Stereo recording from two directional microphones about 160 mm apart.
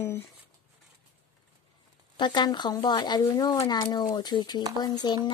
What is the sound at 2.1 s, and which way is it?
Speech, 30° left (ahead or behind).